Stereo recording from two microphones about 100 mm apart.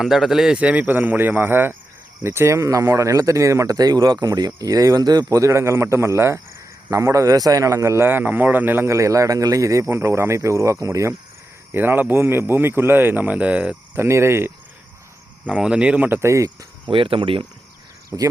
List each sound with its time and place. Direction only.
0.0 s a man's voice: centre (ahead or behind); by 11.1 s 30° right (ahead or behind)
11.7 s speech: 20° right (ahead or behind)
13.9 s speech: 25° right (ahead or behind)
15.4 s speech: 10° right (ahead or behind); by 16.6 s 30° right (ahead or behind)
16.8 s speech: 60° right (ahead or behind)
18.1 s a man's voice: 35° right (ahead or behind)